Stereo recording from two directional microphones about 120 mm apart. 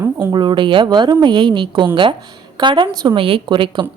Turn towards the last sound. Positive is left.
turn(degrees=-45)  # may be behind; listen again after turning